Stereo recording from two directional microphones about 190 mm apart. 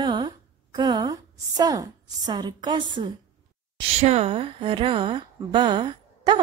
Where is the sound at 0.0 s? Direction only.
25° right (ahead or behind).